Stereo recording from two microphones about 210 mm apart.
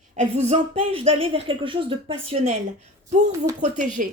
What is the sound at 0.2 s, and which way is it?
Speech, 30° right (ahead or behind).